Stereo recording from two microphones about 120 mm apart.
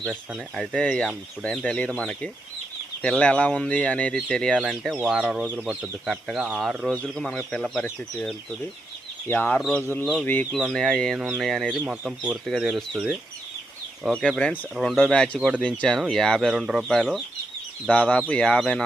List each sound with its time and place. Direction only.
0.0 s speech: 5° right (ahead or behind)
0.6 s speech: 10° left (ahead or behind)
9.3 s speech: 15° left (ahead or behind)
9.6 s speech: centre (ahead or behind)